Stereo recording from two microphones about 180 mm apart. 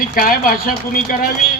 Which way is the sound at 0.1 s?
50° left (ahead or behind).